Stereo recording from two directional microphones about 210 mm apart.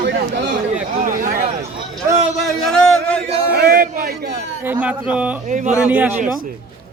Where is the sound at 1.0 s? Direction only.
40° right (ahead or behind).